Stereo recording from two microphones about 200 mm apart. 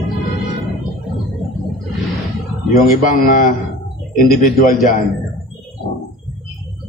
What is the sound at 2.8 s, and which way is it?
A man's voice, 45° left (ahead or behind).